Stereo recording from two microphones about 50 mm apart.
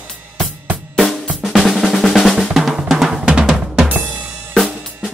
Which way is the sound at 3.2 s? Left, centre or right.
Centre.